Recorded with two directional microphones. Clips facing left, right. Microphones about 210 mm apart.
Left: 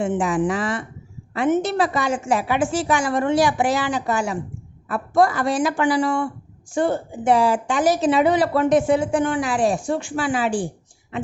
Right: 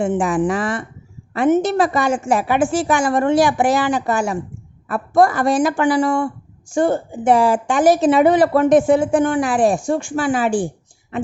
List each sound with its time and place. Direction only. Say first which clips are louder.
0.0 s a woman's voice: right 3 dB; 50° right (ahead or behind)